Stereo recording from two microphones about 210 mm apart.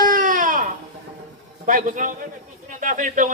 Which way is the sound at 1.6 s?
40° right (ahead or behind).